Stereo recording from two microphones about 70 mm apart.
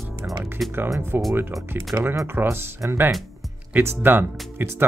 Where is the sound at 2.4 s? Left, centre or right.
Right.